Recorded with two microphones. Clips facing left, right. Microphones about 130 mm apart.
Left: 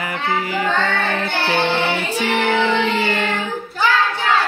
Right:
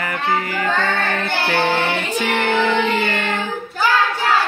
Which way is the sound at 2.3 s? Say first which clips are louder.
Even; 15° left (ahead or behind).